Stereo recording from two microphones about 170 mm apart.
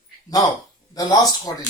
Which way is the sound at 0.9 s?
20° left (ahead or behind).